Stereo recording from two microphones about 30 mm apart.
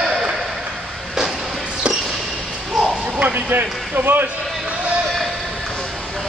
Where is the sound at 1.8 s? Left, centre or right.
Right.